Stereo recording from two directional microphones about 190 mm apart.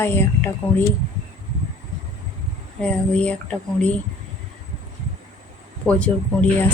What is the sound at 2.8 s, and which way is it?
Speech, 5° left (ahead or behind).